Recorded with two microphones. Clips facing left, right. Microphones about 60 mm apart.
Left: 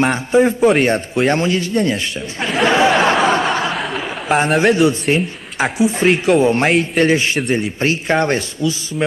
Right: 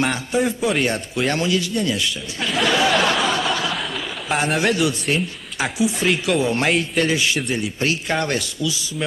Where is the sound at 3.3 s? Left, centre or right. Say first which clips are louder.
Left 5 dB; left.